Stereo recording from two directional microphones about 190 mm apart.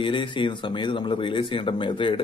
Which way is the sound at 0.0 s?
25° left (ahead or behind).